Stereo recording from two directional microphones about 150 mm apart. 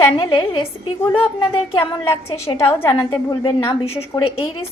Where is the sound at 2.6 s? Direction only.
15° left (ahead or behind).